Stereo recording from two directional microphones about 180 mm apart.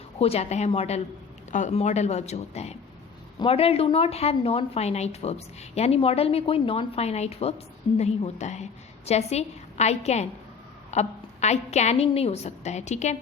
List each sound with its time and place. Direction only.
0.2 s a woman's voice: 35° left (ahead or behind)